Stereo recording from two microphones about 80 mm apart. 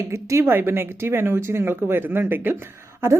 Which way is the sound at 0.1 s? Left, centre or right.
Right.